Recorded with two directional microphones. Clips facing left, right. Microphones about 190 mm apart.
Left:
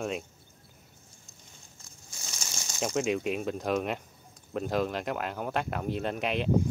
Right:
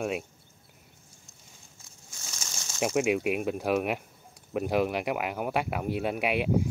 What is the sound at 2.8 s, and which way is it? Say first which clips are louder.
Speech: right 3 dB; 10° right (ahead or behind).